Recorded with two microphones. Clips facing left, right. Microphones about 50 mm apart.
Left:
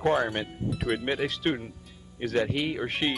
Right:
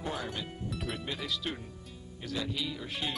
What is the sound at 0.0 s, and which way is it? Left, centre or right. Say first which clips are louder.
Speech: left 11 dB; left.